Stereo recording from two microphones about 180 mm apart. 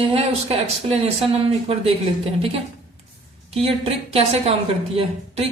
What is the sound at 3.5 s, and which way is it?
A woman's voice, 35° right (ahead or behind).